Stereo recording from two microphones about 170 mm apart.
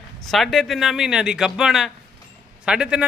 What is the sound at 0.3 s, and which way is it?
A man's voice, centre (ahead or behind).